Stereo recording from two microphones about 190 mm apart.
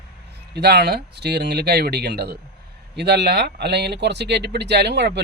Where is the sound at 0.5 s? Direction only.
60° right (ahead or behind).